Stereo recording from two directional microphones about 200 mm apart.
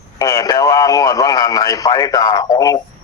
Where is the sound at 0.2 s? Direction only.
15° left (ahead or behind).